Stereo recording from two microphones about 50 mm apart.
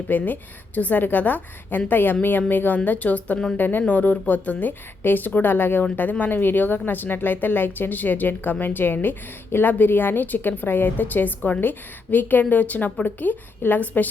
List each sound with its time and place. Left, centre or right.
0.1 s speech: left